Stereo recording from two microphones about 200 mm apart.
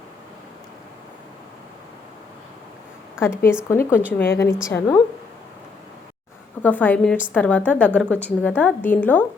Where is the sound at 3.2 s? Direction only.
5° right (ahead or behind).